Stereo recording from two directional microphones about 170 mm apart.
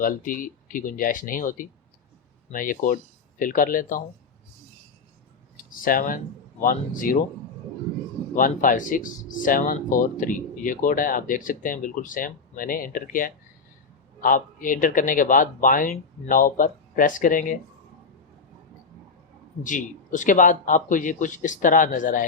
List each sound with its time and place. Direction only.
0.0 s speech: 55° left (ahead or behind)
5.8 s speech: 55° left (ahead or behind)
8.4 s speech: 55° left (ahead or behind)
19.6 s speech: 50° left (ahead or behind)